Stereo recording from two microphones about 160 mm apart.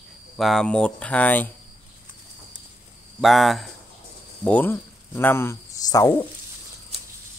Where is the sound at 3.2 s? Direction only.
Centre (ahead or behind).